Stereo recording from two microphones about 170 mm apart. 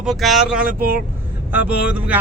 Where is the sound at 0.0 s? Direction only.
Centre (ahead or behind).